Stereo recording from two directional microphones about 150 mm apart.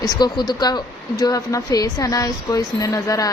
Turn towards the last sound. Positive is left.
turn(degrees=25)  # may be behind; listen again after turning